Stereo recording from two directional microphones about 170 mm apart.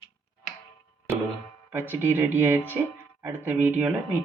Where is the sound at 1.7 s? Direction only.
10° right (ahead or behind).